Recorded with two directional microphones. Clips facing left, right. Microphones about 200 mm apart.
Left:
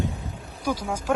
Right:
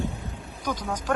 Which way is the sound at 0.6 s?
10° left (ahead or behind).